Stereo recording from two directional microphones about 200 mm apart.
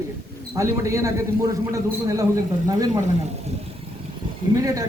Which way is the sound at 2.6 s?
20° right (ahead or behind).